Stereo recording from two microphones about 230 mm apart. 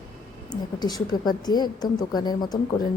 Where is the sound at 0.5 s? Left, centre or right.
Centre.